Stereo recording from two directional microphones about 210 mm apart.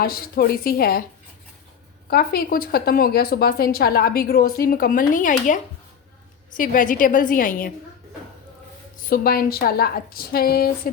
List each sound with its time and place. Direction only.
0.0 s a woman's voice: 45° left (ahead or behind)
2.0 s a woman's voice: 45° left (ahead or behind)
6.6 s a woman's voice: 40° left (ahead or behind)
9.0 s a woman's voice: 45° left (ahead or behind)